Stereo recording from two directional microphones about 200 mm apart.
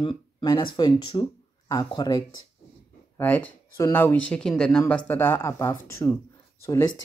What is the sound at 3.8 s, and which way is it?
Speech, 15° left (ahead or behind).